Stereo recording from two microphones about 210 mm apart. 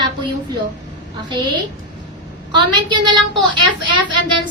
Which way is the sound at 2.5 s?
20° right (ahead or behind).